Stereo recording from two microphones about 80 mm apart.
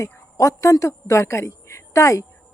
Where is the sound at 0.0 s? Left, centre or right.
Left.